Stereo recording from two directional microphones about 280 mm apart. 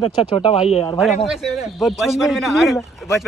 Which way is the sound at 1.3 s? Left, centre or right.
Centre.